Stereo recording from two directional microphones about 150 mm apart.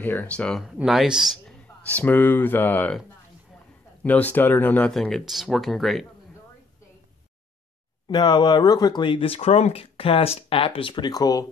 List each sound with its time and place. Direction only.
0.0 s speech: 10° left (ahead or behind)
2.0 s speech: 15° left (ahead or behind)
4.0 s speech: 10° left (ahead or behind)
8.1 s speech: 30° left (ahead or behind)